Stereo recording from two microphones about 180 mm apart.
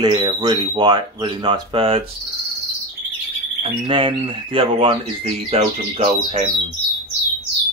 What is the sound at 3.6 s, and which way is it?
Speech, 25° right (ahead or behind).